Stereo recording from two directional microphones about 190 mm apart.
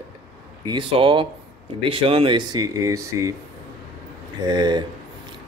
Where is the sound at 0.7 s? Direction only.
25° right (ahead or behind).